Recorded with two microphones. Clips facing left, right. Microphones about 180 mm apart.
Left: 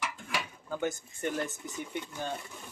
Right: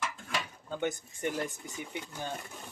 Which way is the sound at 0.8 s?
20° right (ahead or behind).